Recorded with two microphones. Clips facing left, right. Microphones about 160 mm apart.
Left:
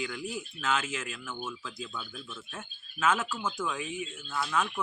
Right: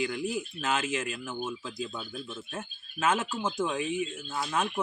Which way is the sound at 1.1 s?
35° right (ahead or behind).